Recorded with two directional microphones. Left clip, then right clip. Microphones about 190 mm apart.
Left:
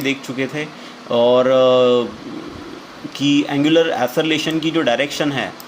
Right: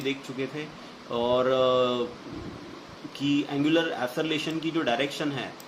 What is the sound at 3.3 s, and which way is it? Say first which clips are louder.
Speech: left 10 dB; 40° left (ahead or behind).